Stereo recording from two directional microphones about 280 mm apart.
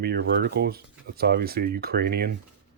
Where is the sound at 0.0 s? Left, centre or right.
Right.